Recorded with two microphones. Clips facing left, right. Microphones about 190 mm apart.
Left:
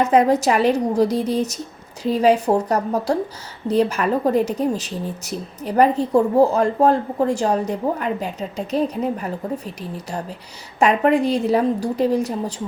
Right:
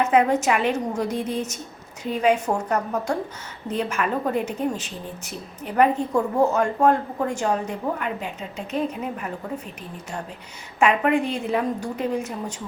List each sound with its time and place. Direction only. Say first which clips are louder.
0.0 s a woman's voice: left 3 dB; 35° left (ahead or behind)